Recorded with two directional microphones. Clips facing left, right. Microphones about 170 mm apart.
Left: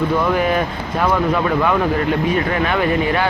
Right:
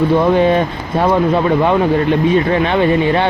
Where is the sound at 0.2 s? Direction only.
25° right (ahead or behind).